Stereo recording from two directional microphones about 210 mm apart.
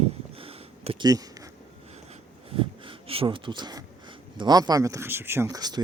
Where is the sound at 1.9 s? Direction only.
30° right (ahead or behind).